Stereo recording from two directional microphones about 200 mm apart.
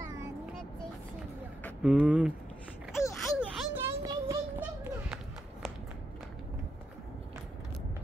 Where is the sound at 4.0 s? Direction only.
20° right (ahead or behind).